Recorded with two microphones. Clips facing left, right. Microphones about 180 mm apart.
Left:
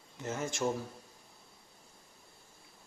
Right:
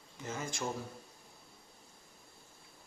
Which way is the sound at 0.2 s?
20° left (ahead or behind).